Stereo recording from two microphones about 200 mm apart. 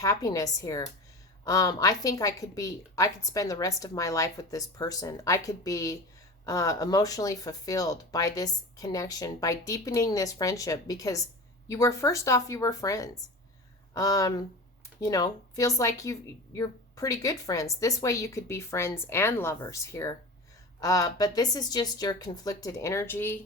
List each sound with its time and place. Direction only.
0.0 s a woman's voice: 15° left (ahead or behind)